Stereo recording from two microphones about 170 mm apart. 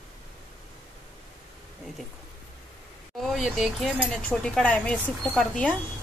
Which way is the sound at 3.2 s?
Centre (ahead or behind).